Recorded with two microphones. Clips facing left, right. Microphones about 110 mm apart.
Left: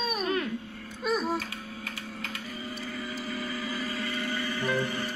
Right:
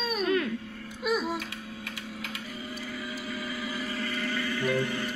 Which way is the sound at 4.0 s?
20° left (ahead or behind).